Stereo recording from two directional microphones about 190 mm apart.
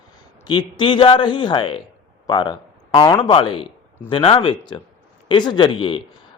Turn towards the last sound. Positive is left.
turn(degrees=25)  # may be behind; listen again after turning